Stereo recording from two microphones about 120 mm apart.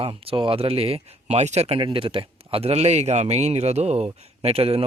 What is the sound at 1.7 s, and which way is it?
Speech, 45° right (ahead or behind).